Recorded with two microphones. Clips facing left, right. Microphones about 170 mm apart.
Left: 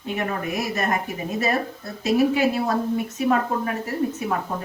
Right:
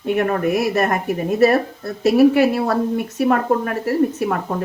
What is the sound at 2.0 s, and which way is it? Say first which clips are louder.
Speech: right 6 dB; 65° right (ahead or behind).